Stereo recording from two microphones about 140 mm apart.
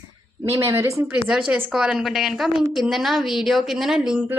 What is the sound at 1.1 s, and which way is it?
A woman's voice, 5° right (ahead or behind).